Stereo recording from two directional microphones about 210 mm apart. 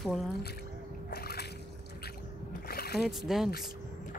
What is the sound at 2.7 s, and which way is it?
Splash, 45° left (ahead or behind).